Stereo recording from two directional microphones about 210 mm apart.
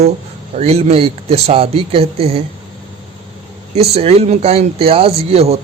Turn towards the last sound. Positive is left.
turn(degrees=-30)  # may be behind; listen again after turning